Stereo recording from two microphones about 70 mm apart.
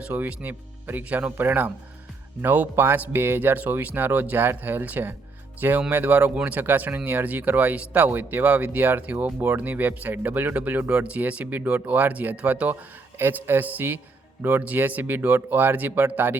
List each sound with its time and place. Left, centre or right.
0.1 s speech: right
13.1 s speech: right